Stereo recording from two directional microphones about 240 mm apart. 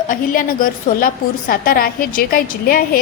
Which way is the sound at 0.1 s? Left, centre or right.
Left.